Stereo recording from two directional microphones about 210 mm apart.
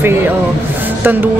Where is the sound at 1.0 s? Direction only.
10° right (ahead or behind).